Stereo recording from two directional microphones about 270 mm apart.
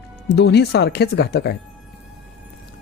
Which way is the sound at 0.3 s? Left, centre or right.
Left.